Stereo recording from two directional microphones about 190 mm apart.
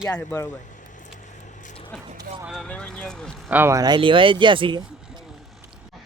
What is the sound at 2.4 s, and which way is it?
Speech, centre (ahead or behind).